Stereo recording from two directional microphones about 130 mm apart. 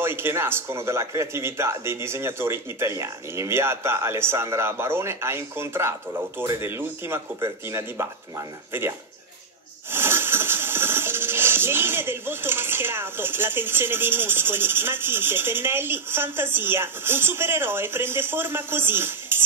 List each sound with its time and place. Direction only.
0.0 s a man's voice: 20° right (ahead or behind)
9.8 s music: 15° right (ahead or behind)